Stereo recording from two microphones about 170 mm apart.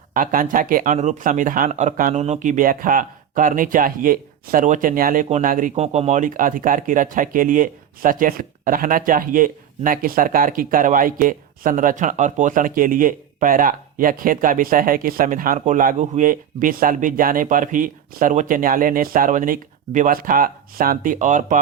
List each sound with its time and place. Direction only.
0.1 s speech: 55° right (ahead or behind)